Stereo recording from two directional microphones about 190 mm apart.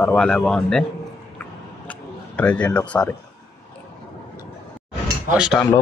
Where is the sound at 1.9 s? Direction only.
10° left (ahead or behind).